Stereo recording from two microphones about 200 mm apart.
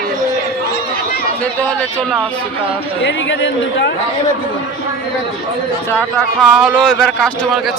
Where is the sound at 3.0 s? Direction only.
65° left (ahead or behind).